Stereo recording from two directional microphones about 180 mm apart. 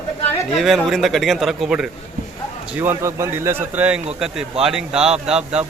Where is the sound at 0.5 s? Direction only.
Centre (ahead or behind).